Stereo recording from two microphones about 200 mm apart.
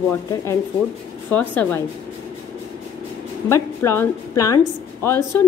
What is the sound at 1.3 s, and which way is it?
Speech, 10° left (ahead or behind).